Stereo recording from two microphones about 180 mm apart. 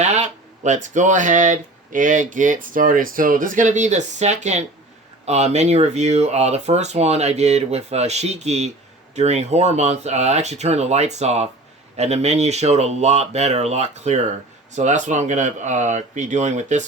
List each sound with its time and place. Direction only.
0.0 s speech: 40° right (ahead or behind)